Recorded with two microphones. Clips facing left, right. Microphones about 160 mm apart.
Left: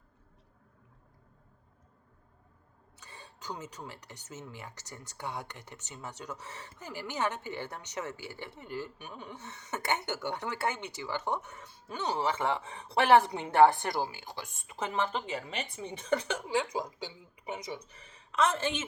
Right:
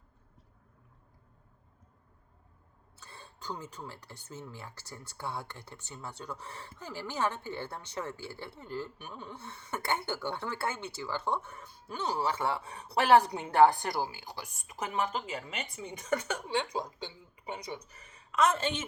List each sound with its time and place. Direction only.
3.0 s a woman's voice: 15° left (ahead or behind)